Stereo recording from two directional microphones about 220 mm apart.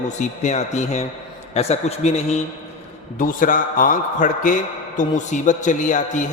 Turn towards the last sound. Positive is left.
turn(degrees=35)  # may be behind; listen again after turning